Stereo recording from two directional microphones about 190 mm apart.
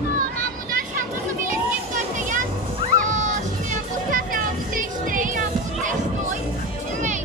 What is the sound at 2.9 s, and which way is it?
Music, 40° right (ahead or behind).